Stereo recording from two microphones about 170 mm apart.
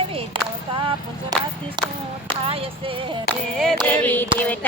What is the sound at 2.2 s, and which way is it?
Speech, 35° right (ahead or behind).